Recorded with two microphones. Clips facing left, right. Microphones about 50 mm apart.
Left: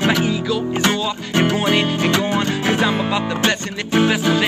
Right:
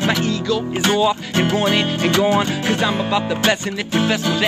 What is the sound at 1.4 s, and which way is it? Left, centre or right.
Speech, centre.